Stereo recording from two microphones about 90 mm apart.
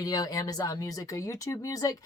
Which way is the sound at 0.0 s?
45° left (ahead or behind).